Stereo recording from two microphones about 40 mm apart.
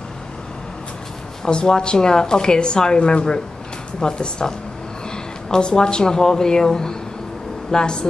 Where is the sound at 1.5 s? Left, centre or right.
Left.